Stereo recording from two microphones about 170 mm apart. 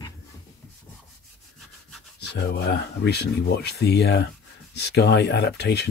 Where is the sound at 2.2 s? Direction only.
80° left.